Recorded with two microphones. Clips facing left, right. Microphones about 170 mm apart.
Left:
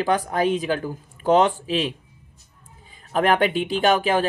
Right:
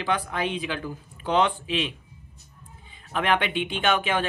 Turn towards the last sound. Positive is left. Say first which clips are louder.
# left 5 dB
turn(degrees=40)  # may be behind; listen again after turning